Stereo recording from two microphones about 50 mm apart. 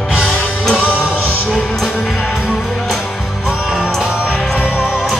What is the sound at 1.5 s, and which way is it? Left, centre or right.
Music, centre.